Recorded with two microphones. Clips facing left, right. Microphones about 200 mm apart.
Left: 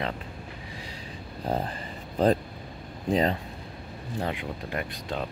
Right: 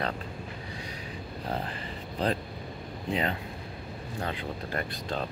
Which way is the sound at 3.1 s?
40° left (ahead or behind).